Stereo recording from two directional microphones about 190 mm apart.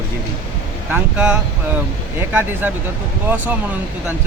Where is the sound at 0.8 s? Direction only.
5° right (ahead or behind).